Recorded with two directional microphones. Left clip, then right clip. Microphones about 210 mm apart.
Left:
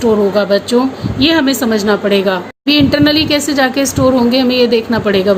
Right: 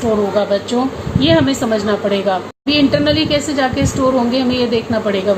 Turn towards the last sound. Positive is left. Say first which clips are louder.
# left 4 dB
turn(degrees=55)  # may be behind; listen again after turning